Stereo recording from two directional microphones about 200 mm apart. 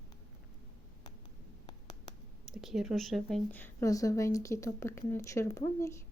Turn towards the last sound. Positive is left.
turn(degrees=15)  # may be behind; listen again after turning